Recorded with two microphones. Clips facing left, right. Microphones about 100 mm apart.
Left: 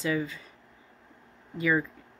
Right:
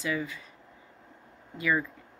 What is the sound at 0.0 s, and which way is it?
Speech, 30° left (ahead or behind).